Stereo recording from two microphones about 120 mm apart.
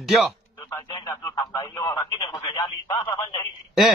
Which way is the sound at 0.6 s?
30° left (ahead or behind).